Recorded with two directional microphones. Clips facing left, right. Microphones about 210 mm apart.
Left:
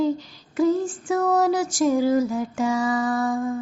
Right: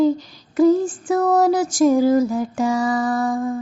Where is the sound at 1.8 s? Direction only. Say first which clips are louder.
Right 4 dB; 45° right (ahead or behind).